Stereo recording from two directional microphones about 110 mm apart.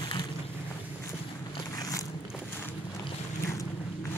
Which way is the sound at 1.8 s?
35° left (ahead or behind).